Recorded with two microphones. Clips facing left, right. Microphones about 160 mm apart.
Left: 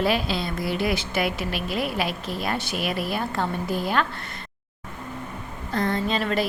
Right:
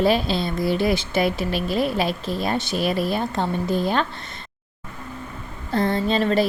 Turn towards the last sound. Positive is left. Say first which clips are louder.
# right 4 dB
turn(degrees=-30)  # may be behind; listen again after turning